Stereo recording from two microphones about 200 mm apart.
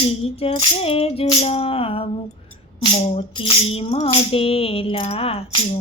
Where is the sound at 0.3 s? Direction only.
30° left (ahead or behind).